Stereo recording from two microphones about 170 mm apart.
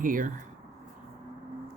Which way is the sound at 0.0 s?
50° right (ahead or behind).